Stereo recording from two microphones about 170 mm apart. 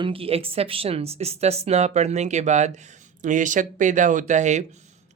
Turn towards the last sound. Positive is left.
turn(degrees=-45)  # may be behind; listen again after turning